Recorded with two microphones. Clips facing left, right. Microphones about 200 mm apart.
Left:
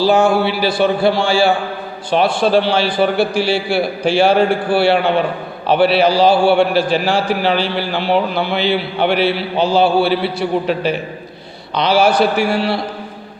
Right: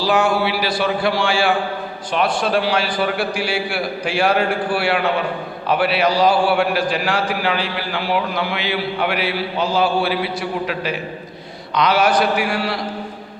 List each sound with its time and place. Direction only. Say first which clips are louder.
0.0 s a man's voice: left 5 dB; 25° left (ahead or behind)